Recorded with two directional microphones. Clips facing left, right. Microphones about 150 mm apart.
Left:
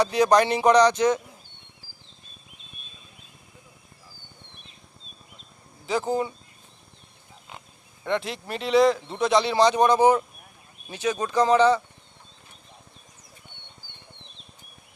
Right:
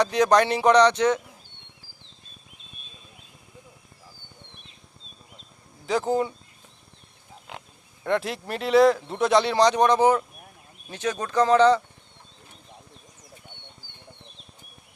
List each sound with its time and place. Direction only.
0.0 s speech: 10° left (ahead or behind)
5.8 s speech: centre (ahead or behind)
7.5 s a sound: 90° right
8.0 s speech: centre (ahead or behind)